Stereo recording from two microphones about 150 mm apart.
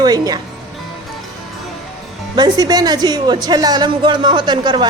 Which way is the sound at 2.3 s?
25° right (ahead or behind).